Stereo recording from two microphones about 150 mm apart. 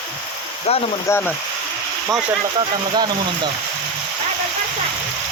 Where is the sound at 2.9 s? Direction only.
30° right (ahead or behind).